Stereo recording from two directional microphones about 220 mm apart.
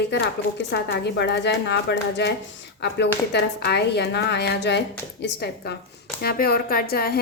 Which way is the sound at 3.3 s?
50° left (ahead or behind).